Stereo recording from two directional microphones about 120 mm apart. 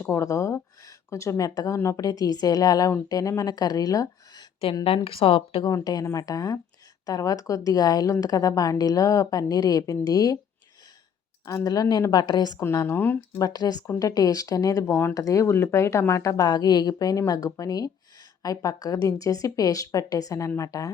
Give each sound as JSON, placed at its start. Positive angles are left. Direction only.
{"t": 0.0, "sound": "a woman's voice", "side_deg": 25}
{"t": 4.6, "sound": "speech", "side_deg": 50}
{"t": 5.6, "sound": "a woman's voice", "side_deg": 35}
{"t": 11.4, "sound": "a woman's voice", "side_deg": 30}
{"t": 12.6, "sound": "a woman's voice", "side_deg": 20}
{"t": 13.4, "sound": "a woman's voice", "side_deg": 35}